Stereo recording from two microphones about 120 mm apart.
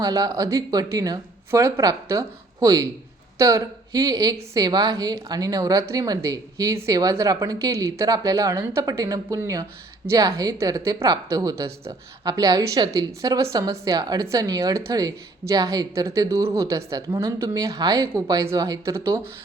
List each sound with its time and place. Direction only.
0.0 s speech: 30° right (ahead or behind)